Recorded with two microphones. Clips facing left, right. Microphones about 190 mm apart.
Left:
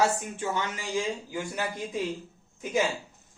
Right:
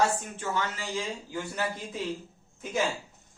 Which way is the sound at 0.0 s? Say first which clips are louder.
Left 1 dB; 15° left (ahead or behind).